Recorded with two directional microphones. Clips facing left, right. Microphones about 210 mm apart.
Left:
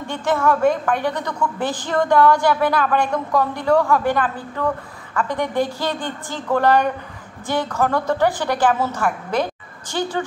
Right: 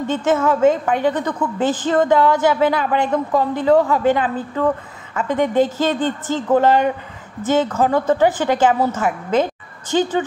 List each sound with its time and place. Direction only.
0.0 s a woman's voice: 20° right (ahead or behind)